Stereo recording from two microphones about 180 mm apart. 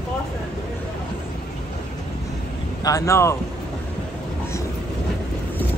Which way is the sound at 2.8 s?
20° left (ahead or behind).